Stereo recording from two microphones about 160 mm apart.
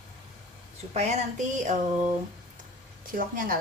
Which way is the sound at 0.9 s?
45° right (ahead or behind).